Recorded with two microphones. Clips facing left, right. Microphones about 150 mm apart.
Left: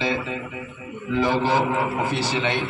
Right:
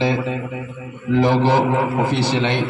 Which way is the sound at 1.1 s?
65° right (ahead or behind).